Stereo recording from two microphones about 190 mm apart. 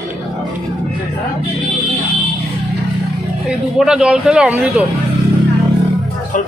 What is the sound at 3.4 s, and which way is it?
Speech, 5° right (ahead or behind).